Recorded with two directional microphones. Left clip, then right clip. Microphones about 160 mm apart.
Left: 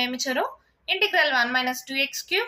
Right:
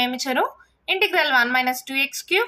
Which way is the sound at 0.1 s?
45° right (ahead or behind).